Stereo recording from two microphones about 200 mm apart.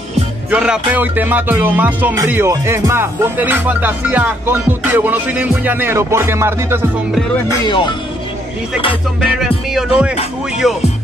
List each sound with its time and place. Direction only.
0.5 s music: 5° right (ahead or behind)
7.6 s speech: 20° left (ahead or behind)
9.4 s music: 5° right (ahead or behind)